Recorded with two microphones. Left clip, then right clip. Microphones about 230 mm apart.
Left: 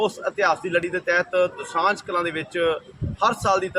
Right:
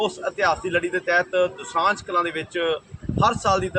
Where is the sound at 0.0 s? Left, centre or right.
Centre.